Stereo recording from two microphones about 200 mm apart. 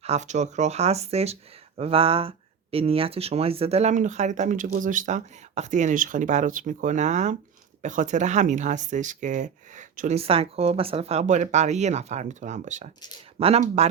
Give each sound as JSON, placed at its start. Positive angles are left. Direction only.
{"t": 0.0, "sound": "speech", "side_deg": -35}